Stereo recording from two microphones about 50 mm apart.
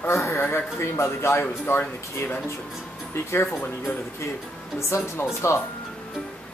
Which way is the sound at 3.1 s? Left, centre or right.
Left.